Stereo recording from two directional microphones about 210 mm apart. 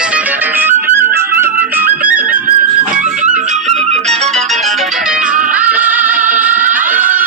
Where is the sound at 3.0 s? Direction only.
35° right (ahead or behind).